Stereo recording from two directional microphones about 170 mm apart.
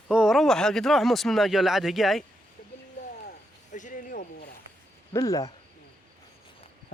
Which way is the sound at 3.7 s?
50° left (ahead or behind).